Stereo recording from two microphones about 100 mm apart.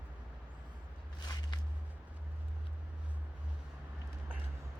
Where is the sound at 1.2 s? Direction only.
45° left (ahead or behind).